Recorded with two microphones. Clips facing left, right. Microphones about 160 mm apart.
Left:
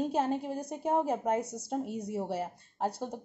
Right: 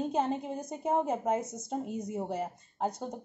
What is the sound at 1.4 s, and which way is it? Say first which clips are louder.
Speech: left 1 dB; 70° left (ahead or behind).